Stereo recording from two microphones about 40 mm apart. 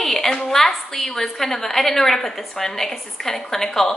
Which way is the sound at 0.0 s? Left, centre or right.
Centre.